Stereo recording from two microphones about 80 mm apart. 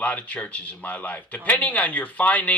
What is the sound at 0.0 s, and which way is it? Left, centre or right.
Speech, centre.